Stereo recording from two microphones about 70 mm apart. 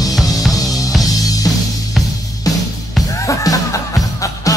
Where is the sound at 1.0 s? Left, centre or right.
Left.